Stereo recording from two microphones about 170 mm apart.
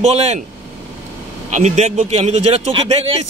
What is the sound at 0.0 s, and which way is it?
Speech, 40° right (ahead or behind).